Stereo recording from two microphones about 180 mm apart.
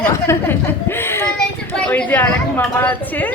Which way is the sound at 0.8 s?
10° left (ahead or behind).